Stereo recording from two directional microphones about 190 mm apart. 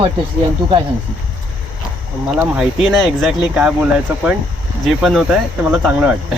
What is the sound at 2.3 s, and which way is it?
Speech, 5° right (ahead or behind).